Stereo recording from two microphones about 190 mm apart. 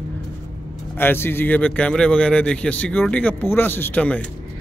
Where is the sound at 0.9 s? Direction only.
10° left (ahead or behind).